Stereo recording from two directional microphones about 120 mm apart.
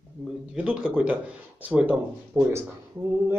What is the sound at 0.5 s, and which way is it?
Speech, 5° right (ahead or behind).